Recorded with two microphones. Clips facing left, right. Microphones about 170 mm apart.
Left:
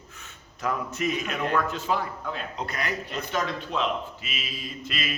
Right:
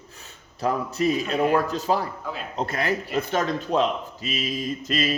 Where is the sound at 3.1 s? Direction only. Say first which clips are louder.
Right 5 dB; 50° right (ahead or behind).